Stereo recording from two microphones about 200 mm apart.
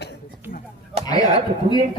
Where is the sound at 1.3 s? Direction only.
25° right (ahead or behind).